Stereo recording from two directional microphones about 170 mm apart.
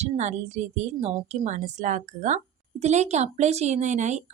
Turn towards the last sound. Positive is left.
turn(degrees=-45)  # may be behind; listen again after turning